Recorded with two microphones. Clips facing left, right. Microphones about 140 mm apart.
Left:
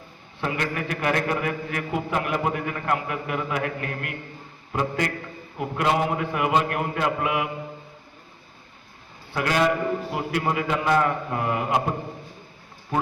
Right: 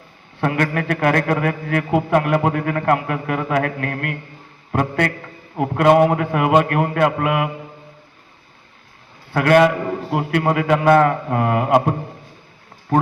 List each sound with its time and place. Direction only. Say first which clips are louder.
0.4 s a man's voice: right 7 dB; 55° right (ahead or behind)
9.3 s a man's voice: right 8 dB; 60° right (ahead or behind)